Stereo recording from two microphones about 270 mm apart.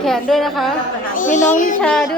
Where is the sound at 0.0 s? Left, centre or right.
Centre.